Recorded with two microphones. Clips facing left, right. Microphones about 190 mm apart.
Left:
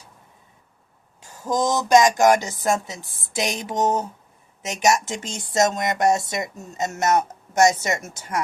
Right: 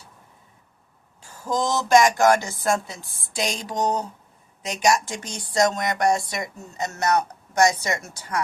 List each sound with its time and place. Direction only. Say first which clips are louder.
1.3 s speech: left 2 dB; 15° left (ahead or behind)